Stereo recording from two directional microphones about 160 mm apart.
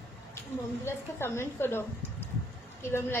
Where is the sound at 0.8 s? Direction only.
15° left (ahead or behind).